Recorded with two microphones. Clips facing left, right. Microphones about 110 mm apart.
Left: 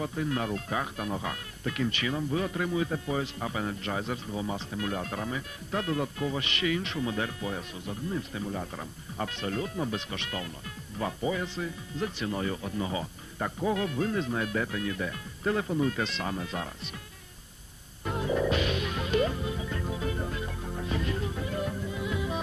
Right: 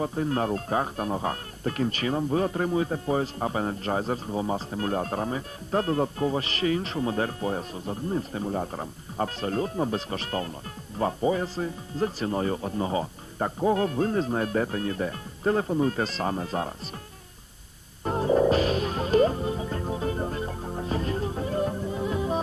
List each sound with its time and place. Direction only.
0.0 s speech: 40° right (ahead or behind)
18.0 s music: 40° right (ahead or behind)